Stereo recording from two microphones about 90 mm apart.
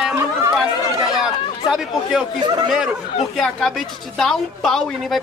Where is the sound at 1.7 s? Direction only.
5° right (ahead or behind).